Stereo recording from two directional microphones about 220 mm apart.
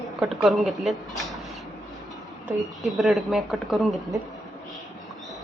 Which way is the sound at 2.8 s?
Centre (ahead or behind).